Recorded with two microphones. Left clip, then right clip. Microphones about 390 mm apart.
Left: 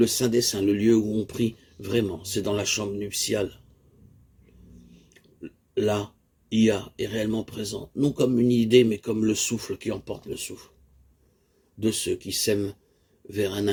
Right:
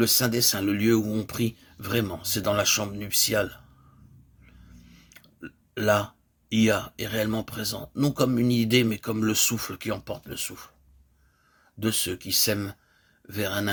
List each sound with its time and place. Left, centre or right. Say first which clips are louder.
0.0 s speech: left 1 dB; right
5.0 s speech: even; right
11.8 s speech: left 2 dB; right